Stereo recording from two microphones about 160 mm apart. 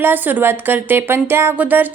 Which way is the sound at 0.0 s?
10° right (ahead or behind).